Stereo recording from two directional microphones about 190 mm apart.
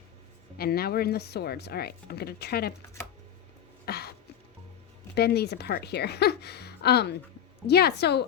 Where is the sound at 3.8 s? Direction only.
55° left (ahead or behind).